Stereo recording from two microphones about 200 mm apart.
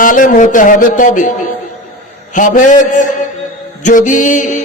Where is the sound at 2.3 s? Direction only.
40° left (ahead or behind).